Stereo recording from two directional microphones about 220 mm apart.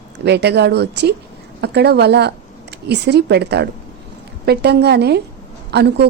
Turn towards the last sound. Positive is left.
turn(degrees=-50)  # may be behind; listen again after turning